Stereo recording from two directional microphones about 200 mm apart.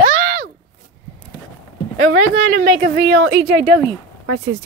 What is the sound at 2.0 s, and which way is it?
Speech, 60° right (ahead or behind).